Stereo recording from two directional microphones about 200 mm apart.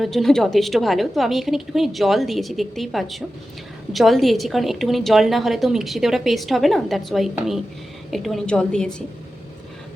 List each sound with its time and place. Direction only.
0.0 s a woman's voice: centre (ahead or behind)